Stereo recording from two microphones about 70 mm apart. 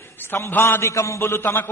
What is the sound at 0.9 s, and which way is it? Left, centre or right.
Speech, left.